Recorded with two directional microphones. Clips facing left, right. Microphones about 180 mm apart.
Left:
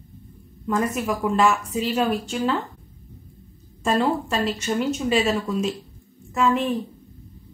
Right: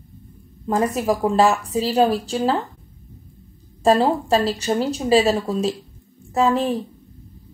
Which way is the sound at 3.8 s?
35° right (ahead or behind).